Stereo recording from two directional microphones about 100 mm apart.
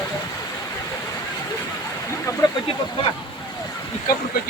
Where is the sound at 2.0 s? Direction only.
30° left (ahead or behind).